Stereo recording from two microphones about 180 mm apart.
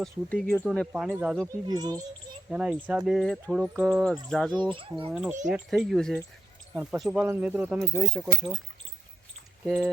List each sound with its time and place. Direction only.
0.0 s speech: 5° left (ahead or behind)
1.5 s speech: 20° right (ahead or behind)
2.5 s speech: 5° right (ahead or behind)
4.5 s speech: 25° right (ahead or behind)
5.5 s speech: centre (ahead or behind)
9.6 s speech: centre (ahead or behind)